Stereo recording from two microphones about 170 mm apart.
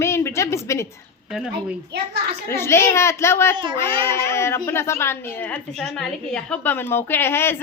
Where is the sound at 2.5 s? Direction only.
15° left (ahead or behind).